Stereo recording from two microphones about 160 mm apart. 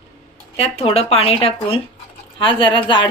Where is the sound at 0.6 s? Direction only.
40° left (ahead or behind).